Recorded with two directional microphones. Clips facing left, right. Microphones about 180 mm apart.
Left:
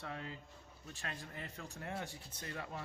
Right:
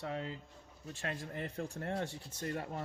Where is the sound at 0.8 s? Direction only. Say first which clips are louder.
Right 6 dB; 35° right (ahead or behind).